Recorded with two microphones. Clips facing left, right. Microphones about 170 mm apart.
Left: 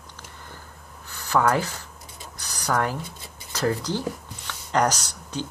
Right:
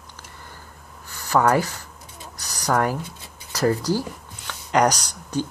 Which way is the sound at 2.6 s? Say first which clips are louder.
Right 3 dB; 15° right (ahead or behind).